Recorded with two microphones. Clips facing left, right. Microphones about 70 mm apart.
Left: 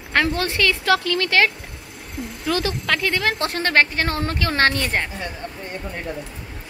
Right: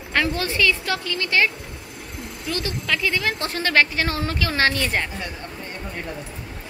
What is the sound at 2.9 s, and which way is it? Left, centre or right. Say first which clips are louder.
A woman's voice: left 1 dB; left.